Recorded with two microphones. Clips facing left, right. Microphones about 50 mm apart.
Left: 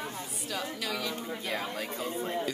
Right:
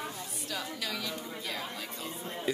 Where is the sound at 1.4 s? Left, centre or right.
Left.